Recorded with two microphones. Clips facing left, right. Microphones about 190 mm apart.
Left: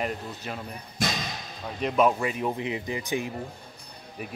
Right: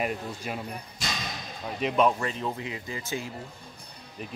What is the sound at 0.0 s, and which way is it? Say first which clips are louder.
Speech: right 1 dB; 10° right (ahead or behind).